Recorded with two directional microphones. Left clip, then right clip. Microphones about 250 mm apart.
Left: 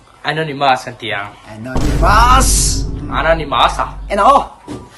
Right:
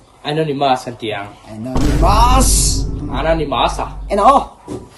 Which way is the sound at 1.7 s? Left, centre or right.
Centre.